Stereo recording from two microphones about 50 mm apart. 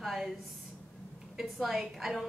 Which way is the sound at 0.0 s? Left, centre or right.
Centre.